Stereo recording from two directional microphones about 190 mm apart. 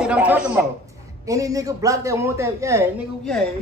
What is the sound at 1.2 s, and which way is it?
Music, 15° right (ahead or behind).